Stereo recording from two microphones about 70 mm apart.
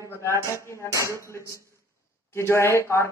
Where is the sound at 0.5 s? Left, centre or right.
Left.